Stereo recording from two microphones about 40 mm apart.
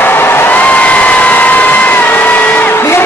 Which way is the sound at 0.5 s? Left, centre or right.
Left.